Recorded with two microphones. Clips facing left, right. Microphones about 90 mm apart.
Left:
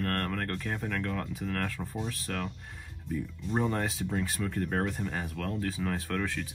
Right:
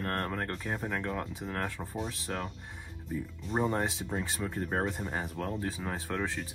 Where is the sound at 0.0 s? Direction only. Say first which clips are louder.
Left 1 dB; 20° right (ahead or behind).